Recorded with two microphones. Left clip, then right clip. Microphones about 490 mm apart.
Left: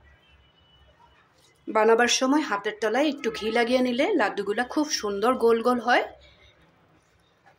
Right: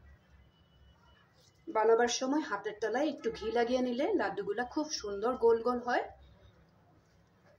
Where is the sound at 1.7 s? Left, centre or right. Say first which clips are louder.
Left 8 dB; right.